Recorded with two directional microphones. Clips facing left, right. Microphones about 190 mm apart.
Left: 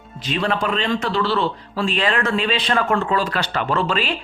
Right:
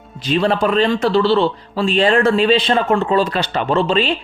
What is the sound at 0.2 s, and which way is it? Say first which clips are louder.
Speech: right 6 dB; 30° right (ahead or behind).